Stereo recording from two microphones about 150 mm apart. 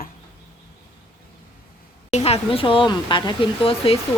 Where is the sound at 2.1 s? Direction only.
45° left (ahead or behind).